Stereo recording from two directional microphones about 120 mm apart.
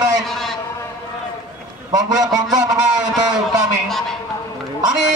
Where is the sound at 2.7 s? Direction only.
5° right (ahead or behind).